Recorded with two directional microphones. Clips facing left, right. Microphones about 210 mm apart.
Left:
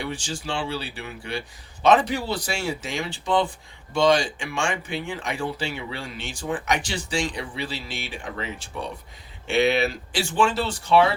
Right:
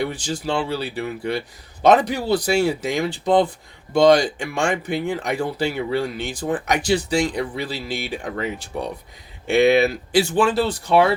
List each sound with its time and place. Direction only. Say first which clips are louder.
0.0 s speech: right 6 dB; 40° right (ahead or behind)